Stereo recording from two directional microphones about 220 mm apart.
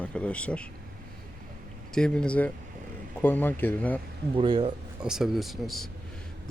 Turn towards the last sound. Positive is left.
turn(degrees=0)  # may be behind; listen again after turning